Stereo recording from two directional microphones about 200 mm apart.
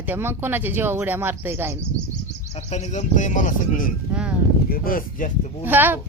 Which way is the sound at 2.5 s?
35° left (ahead or behind).